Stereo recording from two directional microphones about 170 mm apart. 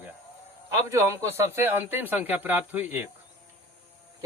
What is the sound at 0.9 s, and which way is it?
Speech, 15° right (ahead or behind).